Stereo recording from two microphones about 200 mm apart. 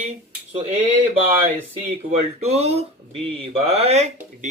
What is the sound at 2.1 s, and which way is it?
Speech, 35° right (ahead or behind).